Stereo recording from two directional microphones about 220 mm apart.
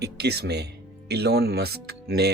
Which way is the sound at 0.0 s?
50° right (ahead or behind).